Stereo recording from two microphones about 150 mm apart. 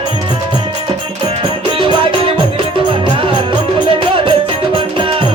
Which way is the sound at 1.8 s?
35° right (ahead or behind).